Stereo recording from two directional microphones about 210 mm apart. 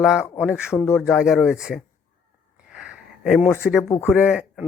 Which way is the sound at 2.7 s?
5° right (ahead or behind).